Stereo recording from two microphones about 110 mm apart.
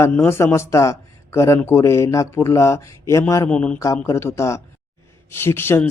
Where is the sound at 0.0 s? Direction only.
25° left (ahead or behind).